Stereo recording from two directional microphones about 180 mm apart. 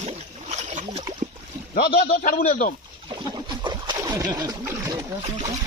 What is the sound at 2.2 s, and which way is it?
Speech, 45° left (ahead or behind).